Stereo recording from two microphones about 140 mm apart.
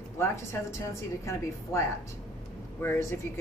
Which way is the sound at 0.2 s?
20° left (ahead or behind).